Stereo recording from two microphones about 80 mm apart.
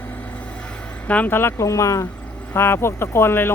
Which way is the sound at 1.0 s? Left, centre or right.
Centre.